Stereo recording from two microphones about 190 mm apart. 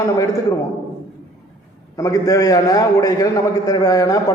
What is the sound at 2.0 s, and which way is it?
A man's voice, 20° left (ahead or behind).